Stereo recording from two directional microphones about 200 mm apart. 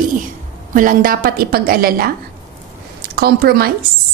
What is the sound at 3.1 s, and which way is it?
Speech, 50° right (ahead or behind).